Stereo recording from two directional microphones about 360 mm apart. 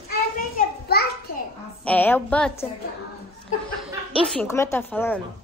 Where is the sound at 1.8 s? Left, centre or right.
Centre.